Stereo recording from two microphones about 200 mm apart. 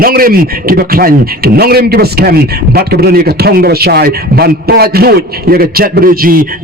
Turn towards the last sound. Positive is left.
turn(degrees=-45)  # may be behind; listen again after turning